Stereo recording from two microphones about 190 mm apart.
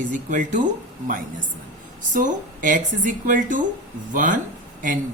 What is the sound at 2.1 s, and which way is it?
Speech, 45° right (ahead or behind).